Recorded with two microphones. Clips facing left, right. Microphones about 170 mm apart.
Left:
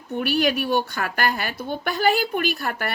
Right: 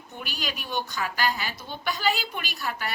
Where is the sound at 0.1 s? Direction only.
60° left (ahead or behind).